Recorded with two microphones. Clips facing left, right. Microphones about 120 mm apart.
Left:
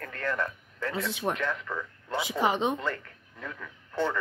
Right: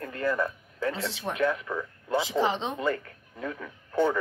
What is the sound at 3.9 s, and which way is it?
Speech, 15° right (ahead or behind).